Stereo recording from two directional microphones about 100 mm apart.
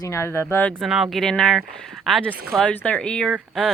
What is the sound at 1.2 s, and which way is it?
Speech, 5° left (ahead or behind).